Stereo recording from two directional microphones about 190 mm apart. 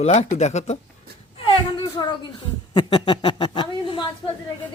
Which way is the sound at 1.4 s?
25° left (ahead or behind).